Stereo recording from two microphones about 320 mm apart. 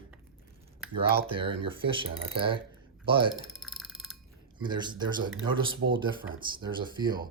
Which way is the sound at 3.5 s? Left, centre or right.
Centre.